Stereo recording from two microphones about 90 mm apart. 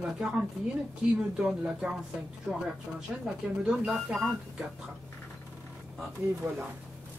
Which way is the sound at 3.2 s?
10° right (ahead or behind).